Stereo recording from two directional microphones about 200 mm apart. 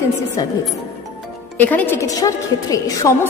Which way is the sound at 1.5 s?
10° left (ahead or behind).